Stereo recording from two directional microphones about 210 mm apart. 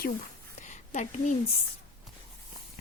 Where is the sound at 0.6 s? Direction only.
35° left (ahead or behind).